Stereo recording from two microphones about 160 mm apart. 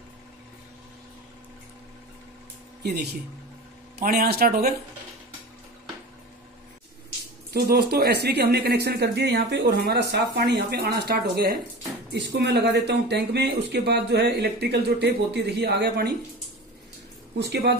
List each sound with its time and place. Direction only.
2.8 s speech: 90° right
4.0 s a man's voice: 75° right (ahead or behind)
7.5 s speech: 80° right
17.4 s speech: 90° right